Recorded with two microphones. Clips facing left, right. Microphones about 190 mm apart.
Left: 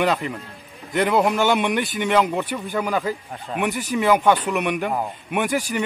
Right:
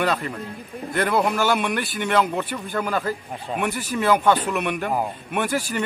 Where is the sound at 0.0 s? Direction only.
15° left (ahead or behind).